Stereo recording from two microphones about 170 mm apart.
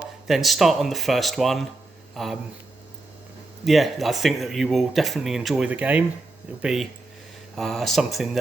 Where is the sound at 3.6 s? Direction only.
Centre (ahead or behind).